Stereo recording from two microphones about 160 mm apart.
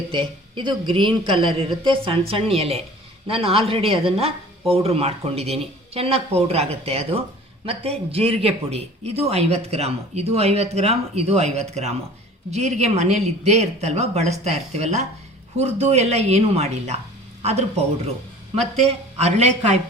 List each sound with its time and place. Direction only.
0.1 s a man's voice: 30° right (ahead or behind)